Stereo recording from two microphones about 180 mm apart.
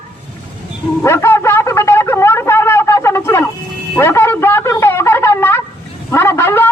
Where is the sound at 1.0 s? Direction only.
15° left (ahead or behind).